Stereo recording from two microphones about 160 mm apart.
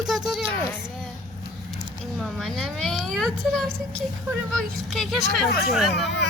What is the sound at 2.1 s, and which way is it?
Speech, centre (ahead or behind).